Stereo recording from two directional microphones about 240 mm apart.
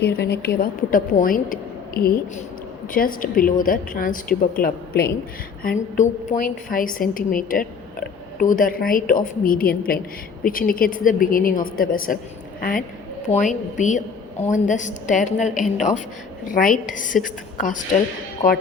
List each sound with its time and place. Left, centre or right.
0.0 s a woman's voice: left